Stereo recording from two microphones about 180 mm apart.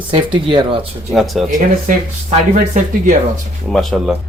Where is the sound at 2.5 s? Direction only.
45° right (ahead or behind).